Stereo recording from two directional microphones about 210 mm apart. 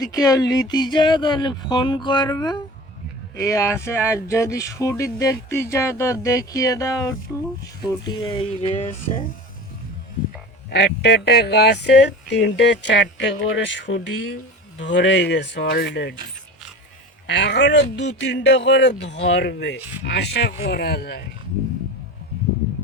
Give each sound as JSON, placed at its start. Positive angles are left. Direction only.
{"t": 0.0, "sound": "speech", "side_deg": 15}
{"t": 10.7, "sound": "speech", "side_deg": 50}
{"t": 17.2, "sound": "speech", "side_deg": 55}